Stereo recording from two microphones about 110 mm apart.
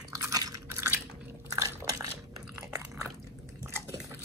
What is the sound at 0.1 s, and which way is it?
Chewing, 30° right (ahead or behind).